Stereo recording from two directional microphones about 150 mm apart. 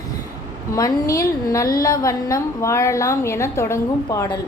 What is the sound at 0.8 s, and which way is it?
A woman's voice, 25° left (ahead or behind).